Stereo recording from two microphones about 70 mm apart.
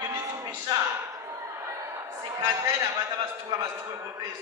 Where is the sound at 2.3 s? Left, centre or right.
Right.